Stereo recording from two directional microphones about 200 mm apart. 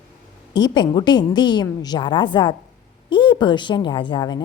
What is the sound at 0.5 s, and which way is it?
Speech, 20° left (ahead or behind).